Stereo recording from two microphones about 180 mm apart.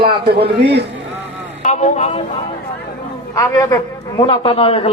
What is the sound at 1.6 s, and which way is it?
Speech, 40° left (ahead or behind).